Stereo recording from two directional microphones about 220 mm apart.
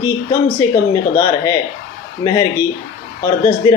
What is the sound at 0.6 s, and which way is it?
Speech, 15° left (ahead or behind).